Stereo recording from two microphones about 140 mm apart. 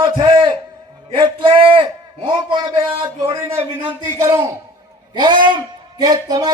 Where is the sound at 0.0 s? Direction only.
35° right (ahead or behind).